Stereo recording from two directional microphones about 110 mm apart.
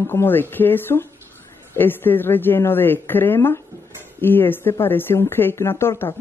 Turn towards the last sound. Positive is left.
turn(degrees=25)  # may be behind; listen again after turning